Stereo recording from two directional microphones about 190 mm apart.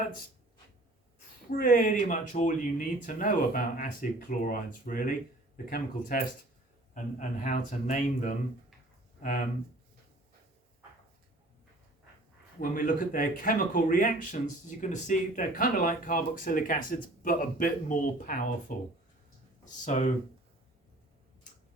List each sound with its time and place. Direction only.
1.5 s speech: 45° left (ahead or behind)
12.5 s speech: 45° left (ahead or behind)